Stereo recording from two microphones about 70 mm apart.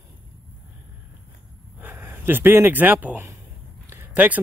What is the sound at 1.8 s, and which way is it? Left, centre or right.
Speech, right.